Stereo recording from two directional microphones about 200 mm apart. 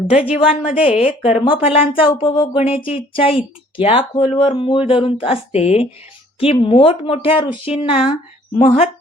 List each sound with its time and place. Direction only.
0.1 s a woman's voice: 40° left (ahead or behind)
0.5 s speech: 30° left (ahead or behind)